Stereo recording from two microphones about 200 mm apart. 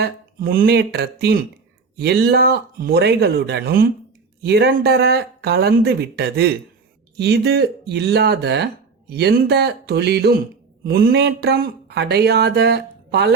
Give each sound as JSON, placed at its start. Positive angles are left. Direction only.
{"t": 0.0, "sound": "speech", "side_deg": -50}